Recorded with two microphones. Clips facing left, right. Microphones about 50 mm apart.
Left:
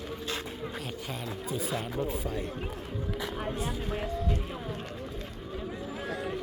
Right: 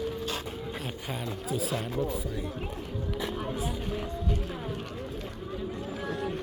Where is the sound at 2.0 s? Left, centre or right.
Left.